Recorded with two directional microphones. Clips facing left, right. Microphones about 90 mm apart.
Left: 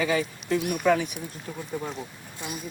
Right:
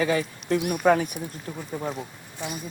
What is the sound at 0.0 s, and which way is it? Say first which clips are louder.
Speech: right 1 dB; 40° right (ahead or behind).